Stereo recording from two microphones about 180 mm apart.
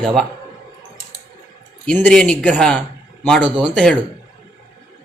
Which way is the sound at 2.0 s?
5° left (ahead or behind).